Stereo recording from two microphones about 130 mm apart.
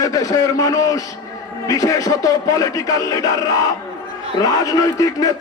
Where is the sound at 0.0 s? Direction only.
25° left (ahead or behind).